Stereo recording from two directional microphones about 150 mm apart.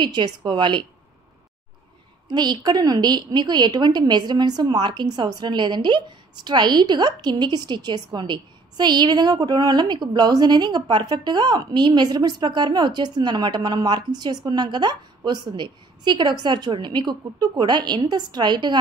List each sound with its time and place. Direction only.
0.0 s a woman's voice: 30° right (ahead or behind)
2.2 s a woman's voice: 30° right (ahead or behind)